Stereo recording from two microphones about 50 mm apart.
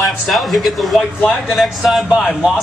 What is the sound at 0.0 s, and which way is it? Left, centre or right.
Speech, centre.